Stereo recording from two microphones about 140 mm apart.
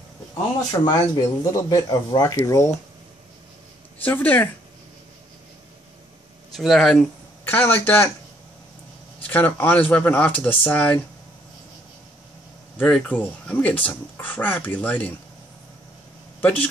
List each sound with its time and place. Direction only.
0.7 s speech: 30° left (ahead or behind)
4.0 s speech: 10° left (ahead or behind)
6.5 s speech: centre (ahead or behind)
7.4 s speech: 15° left (ahead or behind)
9.2 s speech: 15° left (ahead or behind)
12.7 s speech: 10° left (ahead or behind)
16.3 s a sound: 10° left (ahead or behind)